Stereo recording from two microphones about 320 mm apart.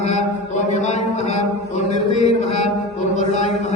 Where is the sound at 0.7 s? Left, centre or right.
Left.